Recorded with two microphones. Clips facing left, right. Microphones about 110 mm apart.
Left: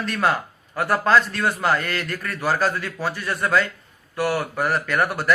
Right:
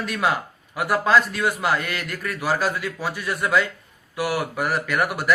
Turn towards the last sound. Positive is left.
turn(degrees=-10)  # may be behind; listen again after turning